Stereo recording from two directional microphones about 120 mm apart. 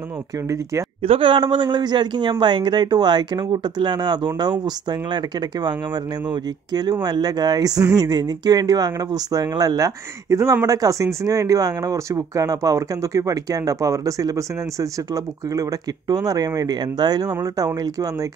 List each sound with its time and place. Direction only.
1.0 s speech: 50° right (ahead or behind); by 17.6 s 30° right (ahead or behind)